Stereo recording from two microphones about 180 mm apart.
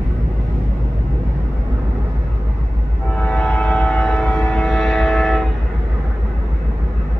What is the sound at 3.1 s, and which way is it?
Train, 5° left (ahead or behind).